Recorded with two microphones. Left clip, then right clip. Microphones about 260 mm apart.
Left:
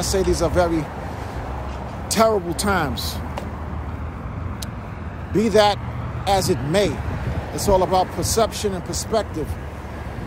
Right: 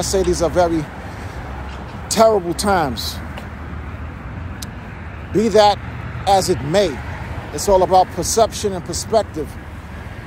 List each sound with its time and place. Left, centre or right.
0.0 s speech: centre
2.0 s speech: centre
5.3 s speech: centre